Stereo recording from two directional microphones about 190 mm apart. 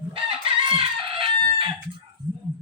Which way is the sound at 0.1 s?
30° right (ahead or behind).